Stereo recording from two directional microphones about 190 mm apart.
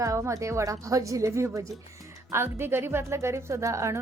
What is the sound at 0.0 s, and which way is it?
Speech, 15° right (ahead or behind).